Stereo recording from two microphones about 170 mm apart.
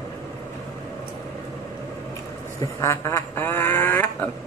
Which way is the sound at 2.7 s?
15° left (ahead or behind).